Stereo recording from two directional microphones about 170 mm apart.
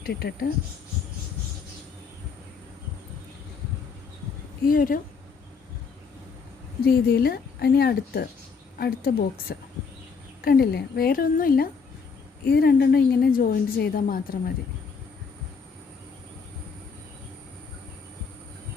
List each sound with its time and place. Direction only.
0.0 s a woman's voice: 70° left (ahead or behind)
4.7 s a woman's voice: 55° left (ahead or behind)
6.8 s a woman's voice: 60° left (ahead or behind)
12.5 s a woman's voice: 70° left (ahead or behind)